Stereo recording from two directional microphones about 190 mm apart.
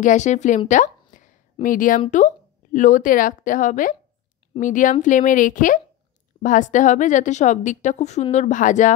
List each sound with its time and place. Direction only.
0.0 s a woman's voice: 40° left (ahead or behind)